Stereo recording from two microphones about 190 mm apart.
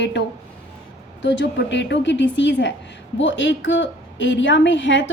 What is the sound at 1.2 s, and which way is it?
A woman's voice, 70° left (ahead or behind).